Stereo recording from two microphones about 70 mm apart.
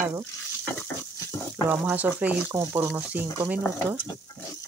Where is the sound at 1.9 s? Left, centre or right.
Right.